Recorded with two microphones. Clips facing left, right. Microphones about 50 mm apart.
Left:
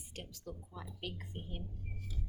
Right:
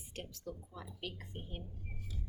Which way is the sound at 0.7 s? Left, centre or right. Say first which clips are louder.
Left 1 dB; centre.